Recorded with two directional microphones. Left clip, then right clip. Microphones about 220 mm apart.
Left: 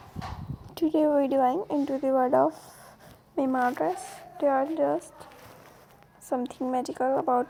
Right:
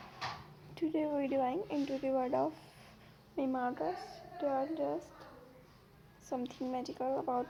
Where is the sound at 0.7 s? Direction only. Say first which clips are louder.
Left 12 dB; 35° left (ahead or behind).